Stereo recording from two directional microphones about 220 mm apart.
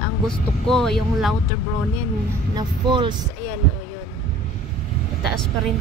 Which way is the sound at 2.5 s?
20° right (ahead or behind).